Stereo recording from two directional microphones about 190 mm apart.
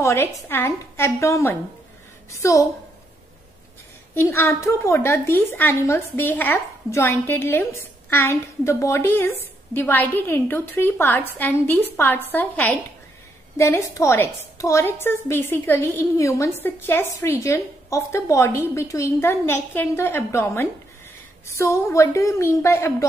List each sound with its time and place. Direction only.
0.0 s a woman's voice: 15° left (ahead or behind)
4.1 s a woman's voice: 10° left (ahead or behind)